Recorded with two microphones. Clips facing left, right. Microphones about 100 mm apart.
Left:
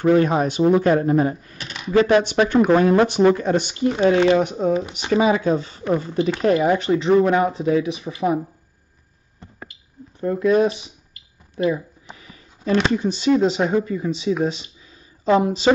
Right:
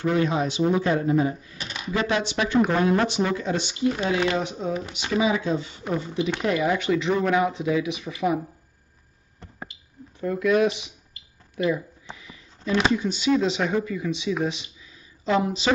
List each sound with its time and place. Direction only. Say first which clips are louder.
0.0 s speech: left 6 dB; 50° left (ahead or behind)
4.1 s speech: left 11 dB; 30° left (ahead or behind)
4.4 s speech: left 8 dB; 50° left (ahead or behind); by 8.4 s 30° left (ahead or behind)
10.2 s speech: left 4 dB; 30° left (ahead or behind)
12.2 s a sound: left 1 dB; 40° left (ahead or behind)
12.9 s speech: left 4 dB; 40° left (ahead or behind)
14.4 s a sound: left 4 dB; 35° left (ahead or behind)